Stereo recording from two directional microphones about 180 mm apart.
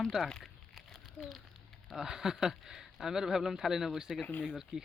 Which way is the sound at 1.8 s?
Centre (ahead or behind).